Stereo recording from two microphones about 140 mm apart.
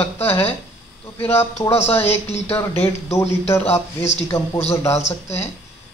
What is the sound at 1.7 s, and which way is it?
Speech, 45° left (ahead or behind).